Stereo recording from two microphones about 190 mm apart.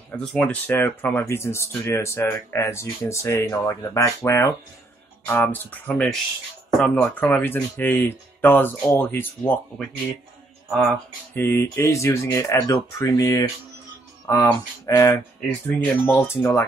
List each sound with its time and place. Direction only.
0.1 s speech: 5° left (ahead or behind)
10.7 s speech: 5° left (ahead or behind)